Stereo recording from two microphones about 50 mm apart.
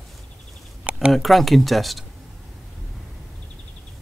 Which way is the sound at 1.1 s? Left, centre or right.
Centre.